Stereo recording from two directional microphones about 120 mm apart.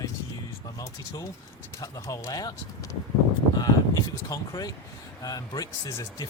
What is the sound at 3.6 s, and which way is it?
Speech, 30° left (ahead or behind).